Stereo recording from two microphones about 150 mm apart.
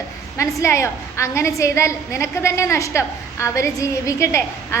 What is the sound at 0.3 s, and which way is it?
A woman's voice, 20° left (ahead or behind).